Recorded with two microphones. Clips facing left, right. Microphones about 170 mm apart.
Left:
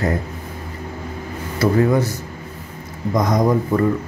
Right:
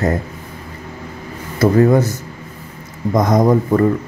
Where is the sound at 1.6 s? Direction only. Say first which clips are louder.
Right 4 dB; 45° right (ahead or behind).